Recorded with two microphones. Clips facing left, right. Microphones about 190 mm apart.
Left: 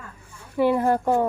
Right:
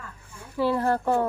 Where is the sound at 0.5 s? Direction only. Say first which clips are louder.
Left 4 dB; 15° left (ahead or behind).